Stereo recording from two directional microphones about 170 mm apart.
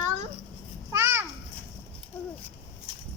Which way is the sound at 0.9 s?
15° right (ahead or behind).